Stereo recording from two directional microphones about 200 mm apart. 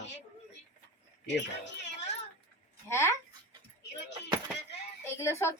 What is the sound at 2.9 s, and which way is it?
Speech, 15° left (ahead or behind).